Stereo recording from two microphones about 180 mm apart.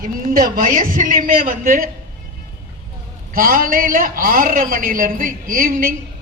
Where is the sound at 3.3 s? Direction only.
50° right (ahead or behind).